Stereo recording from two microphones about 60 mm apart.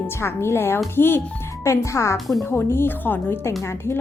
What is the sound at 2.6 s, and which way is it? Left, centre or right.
Speech, left.